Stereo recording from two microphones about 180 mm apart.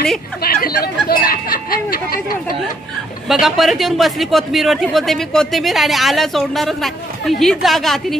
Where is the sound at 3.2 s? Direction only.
Centre (ahead or behind).